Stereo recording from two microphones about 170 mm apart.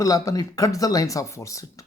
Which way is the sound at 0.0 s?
20° left (ahead or behind).